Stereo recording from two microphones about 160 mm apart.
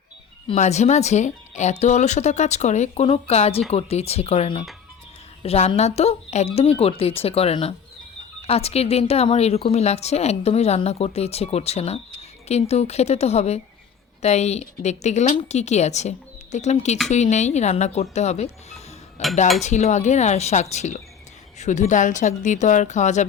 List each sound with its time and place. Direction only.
0.4 s speech: 45° left (ahead or behind)